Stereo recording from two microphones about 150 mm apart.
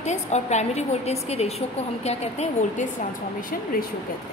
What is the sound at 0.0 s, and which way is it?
A woman's voice, 50° left (ahead or behind).